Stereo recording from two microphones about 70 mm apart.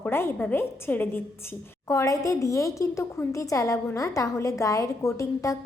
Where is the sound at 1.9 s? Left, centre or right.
Left.